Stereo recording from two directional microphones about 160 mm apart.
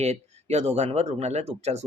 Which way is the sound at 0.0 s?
45° right (ahead or behind).